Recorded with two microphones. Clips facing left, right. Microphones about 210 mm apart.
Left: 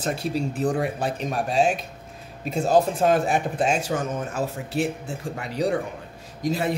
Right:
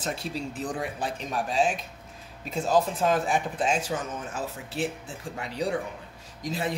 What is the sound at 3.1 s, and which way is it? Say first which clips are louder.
Speech: left 4 dB; 60° left (ahead or behind).